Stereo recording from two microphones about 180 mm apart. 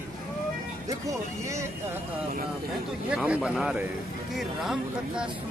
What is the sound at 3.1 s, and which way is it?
Speech, 5° right (ahead or behind).